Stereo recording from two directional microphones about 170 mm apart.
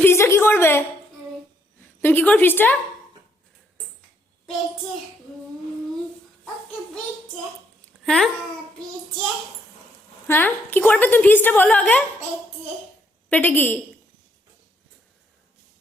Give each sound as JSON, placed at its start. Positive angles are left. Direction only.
{"t": 0.0, "sound": "a sound", "side_deg": 15}
{"t": 2.0, "sound": "a woman's voice", "side_deg": 10}
{"t": 8.0, "sound": "speech", "side_deg": 5}
{"t": 10.2, "sound": "a woman's voice", "side_deg": 10}
{"t": 13.3, "sound": "a woman's voice", "side_deg": 10}